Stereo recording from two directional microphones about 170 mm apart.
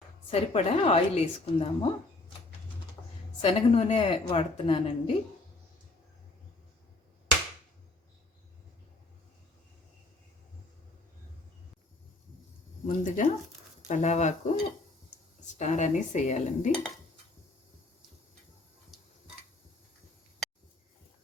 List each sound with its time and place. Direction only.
0.3 s speech: 35° left (ahead or behind)
3.4 s speech: 35° left (ahead or behind)
13.0 s speech: 45° left (ahead or behind)
15.5 s speech: 45° left (ahead or behind)